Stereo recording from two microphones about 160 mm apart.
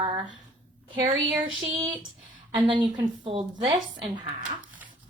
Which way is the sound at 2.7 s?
30° right (ahead or behind).